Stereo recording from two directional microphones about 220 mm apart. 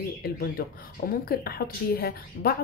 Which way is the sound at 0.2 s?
45° left (ahead or behind).